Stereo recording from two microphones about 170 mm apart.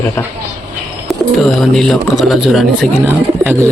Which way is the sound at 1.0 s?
Centre (ahead or behind).